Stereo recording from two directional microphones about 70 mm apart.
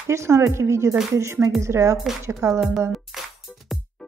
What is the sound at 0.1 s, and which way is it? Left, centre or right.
Speech, right.